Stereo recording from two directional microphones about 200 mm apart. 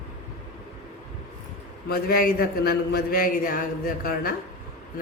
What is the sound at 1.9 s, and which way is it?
A man's voice, 50° left (ahead or behind).